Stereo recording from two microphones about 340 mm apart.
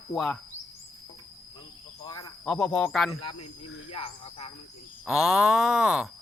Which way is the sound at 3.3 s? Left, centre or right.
Left.